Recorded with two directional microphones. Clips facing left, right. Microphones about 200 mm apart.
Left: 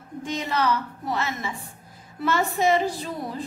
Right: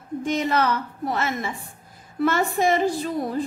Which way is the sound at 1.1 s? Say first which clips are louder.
Right 1 dB; 50° right (ahead or behind).